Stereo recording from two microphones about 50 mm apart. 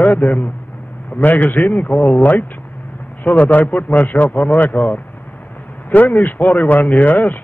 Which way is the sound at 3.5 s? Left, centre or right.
Left.